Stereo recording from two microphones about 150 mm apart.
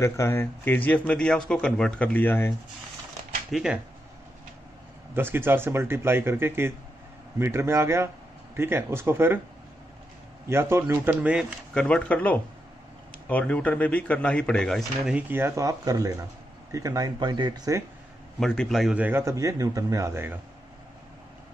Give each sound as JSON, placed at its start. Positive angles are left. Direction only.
{"t": 0.0, "sound": "speech", "side_deg": 15}
{"t": 3.5, "sound": "a man's voice", "side_deg": -5}
{"t": 5.1, "sound": "speech", "side_deg": -15}
{"t": 10.5, "sound": "speech", "side_deg": -15}
{"t": 11.7, "sound": "speech", "side_deg": 5}
{"t": 15.0, "sound": "speech", "side_deg": -10}
{"t": 18.4, "sound": "a man's voice", "side_deg": 5}
{"t": 18.9, "sound": "speech", "side_deg": -15}